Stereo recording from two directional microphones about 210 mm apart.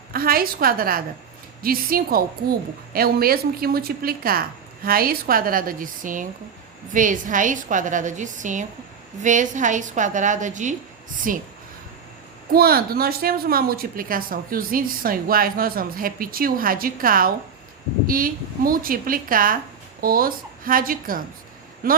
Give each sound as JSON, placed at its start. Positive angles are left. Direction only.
{"t": 0.1, "sound": "a woman's voice", "side_deg": -45}
{"t": 12.5, "sound": "a woman's voice", "side_deg": -45}